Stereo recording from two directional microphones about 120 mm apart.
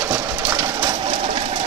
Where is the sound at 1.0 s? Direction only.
60° right (ahead or behind).